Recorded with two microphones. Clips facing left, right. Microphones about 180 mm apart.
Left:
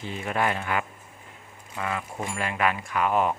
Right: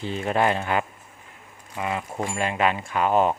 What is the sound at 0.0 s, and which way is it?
Speech, 30° right (ahead or behind).